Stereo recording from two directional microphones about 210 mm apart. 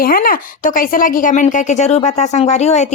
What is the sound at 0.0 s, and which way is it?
A woman's voice, 45° left (ahead or behind).